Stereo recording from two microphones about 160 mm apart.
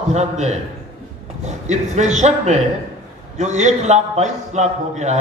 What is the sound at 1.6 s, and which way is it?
A man's voice, 45° right (ahead or behind).